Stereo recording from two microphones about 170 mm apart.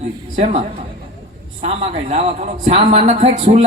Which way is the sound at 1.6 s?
40° right (ahead or behind).